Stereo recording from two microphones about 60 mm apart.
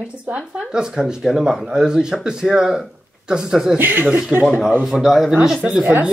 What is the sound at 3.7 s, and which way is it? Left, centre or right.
Speech, right.